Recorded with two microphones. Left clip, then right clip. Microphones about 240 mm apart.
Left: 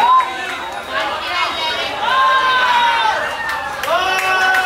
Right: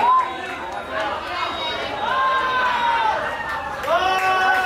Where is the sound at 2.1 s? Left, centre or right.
Centre.